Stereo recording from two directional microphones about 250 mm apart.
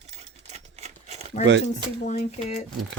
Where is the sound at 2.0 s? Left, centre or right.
Left.